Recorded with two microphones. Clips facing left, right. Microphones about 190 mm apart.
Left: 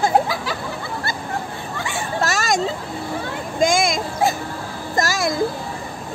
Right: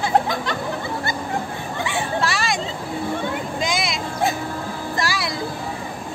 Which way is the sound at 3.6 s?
45° left (ahead or behind).